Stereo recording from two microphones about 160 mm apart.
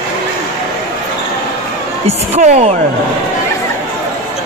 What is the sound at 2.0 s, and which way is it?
Speech, 45° right (ahead or behind).